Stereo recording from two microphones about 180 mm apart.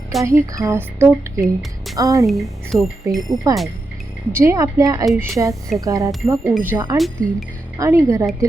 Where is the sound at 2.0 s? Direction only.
20° right (ahead or behind).